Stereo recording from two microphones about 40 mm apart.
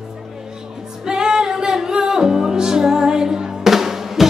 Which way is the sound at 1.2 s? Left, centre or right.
Centre.